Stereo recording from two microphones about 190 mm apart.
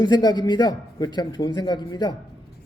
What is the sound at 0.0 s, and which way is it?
A man's voice, 20° left (ahead or behind).